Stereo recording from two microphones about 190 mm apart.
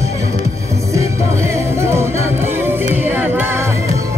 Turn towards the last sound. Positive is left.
turn(degrees=-10)  # may be behind; listen again after turning